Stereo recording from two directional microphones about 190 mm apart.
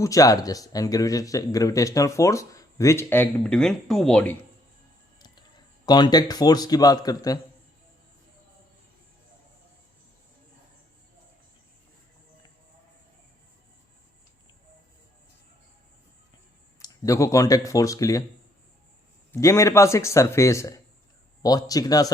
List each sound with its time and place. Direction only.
0.0 s speech: 15° left (ahead or behind)
5.8 s a man's voice: 20° left (ahead or behind)
16.8 s speech: 15° left (ahead or behind)
19.3 s a man's voice: 15° left (ahead or behind)